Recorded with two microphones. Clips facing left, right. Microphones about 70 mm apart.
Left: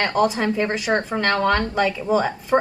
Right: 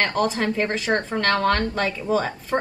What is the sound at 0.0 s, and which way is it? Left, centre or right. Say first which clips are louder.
A woman's voice: left 2 dB; centre.